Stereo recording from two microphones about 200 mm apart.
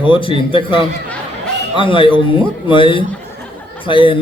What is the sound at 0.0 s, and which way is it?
A man's voice, 25° left (ahead or behind).